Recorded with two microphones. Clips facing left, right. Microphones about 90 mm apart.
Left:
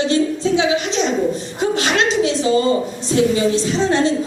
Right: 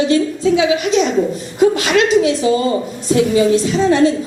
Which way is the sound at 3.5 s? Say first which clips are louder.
Right 4 dB; 30° left (ahead or behind).